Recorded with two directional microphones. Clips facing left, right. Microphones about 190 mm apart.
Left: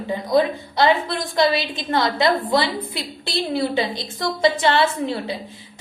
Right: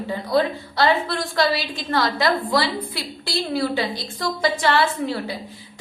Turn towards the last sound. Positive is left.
turn(degrees=20)  # may be behind; listen again after turning